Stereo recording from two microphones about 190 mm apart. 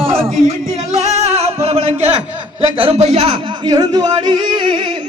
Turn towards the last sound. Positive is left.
turn(degrees=-25)  # may be behind; listen again after turning